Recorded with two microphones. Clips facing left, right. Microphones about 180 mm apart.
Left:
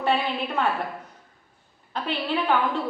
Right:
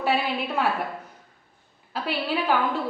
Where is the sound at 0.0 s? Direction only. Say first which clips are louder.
Even; 5° right (ahead or behind).